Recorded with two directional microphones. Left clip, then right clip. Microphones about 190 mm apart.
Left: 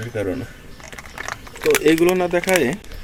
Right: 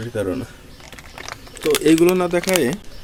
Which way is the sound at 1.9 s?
25° right (ahead or behind).